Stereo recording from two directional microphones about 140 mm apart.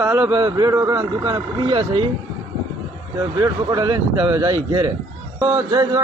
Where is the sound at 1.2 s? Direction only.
35° right (ahead or behind).